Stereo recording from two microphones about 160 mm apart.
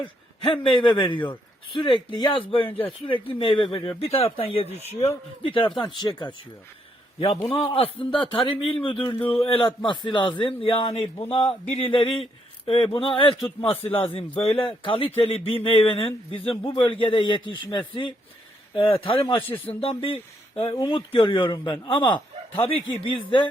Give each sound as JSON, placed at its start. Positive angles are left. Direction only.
{"t": 0.4, "sound": "speech", "side_deg": 30}